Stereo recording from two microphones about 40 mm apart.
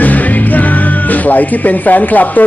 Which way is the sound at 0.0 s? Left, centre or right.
Left.